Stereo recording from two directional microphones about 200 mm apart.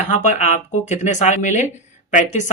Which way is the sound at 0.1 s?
40° left (ahead or behind).